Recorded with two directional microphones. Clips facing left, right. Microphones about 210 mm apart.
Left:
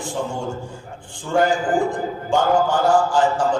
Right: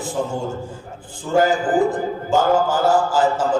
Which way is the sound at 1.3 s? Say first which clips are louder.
Right 1 dB; 5° right (ahead or behind).